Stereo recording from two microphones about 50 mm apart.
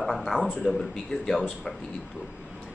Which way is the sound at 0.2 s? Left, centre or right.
Centre.